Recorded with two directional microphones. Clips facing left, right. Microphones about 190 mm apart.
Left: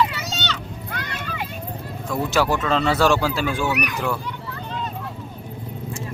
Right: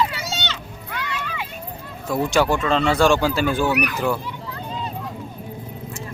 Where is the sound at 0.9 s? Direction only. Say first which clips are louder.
Right 2 dB; 45° left (ahead or behind).